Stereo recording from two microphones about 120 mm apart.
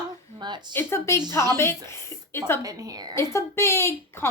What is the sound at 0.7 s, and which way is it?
A woman's voice, 20° left (ahead or behind).